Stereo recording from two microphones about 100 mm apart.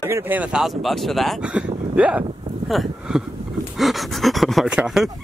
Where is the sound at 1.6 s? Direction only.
10° right (ahead or behind).